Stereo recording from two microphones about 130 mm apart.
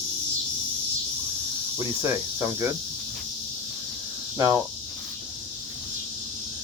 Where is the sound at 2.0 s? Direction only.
20° right (ahead or behind).